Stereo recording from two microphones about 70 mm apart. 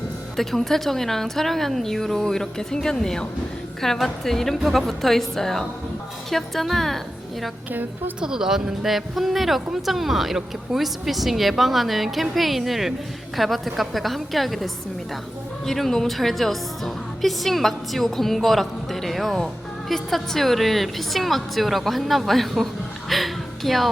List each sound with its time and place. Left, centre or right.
0.3 s a woman's voice: centre
7.7 s a woman's voice: right
8.2 s a woman's voice: centre